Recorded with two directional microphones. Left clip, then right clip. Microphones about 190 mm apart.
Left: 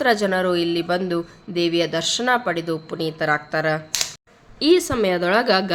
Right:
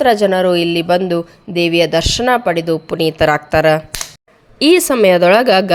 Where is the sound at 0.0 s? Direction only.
25° right (ahead or behind).